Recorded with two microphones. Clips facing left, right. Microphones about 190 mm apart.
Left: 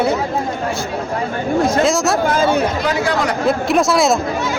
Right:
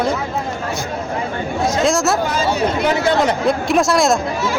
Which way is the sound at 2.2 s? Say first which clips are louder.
Left 3 dB; 55° left (ahead or behind).